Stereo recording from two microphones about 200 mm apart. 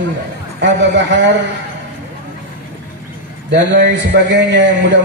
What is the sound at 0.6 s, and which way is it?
Speech, 60° right (ahead or behind).